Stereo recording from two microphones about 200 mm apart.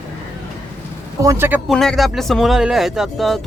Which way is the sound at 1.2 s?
15° right (ahead or behind).